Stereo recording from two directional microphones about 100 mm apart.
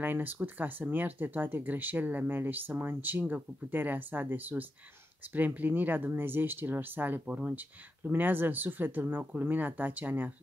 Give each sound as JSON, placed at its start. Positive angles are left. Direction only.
{"t": 0.0, "sound": "speech", "side_deg": -20}